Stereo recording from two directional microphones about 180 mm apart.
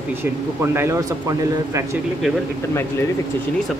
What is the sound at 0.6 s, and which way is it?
Speech, 15° right (ahead or behind).